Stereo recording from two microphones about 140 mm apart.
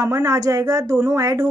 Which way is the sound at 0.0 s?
25° right (ahead or behind).